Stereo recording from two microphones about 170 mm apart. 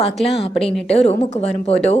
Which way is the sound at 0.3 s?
35° left (ahead or behind).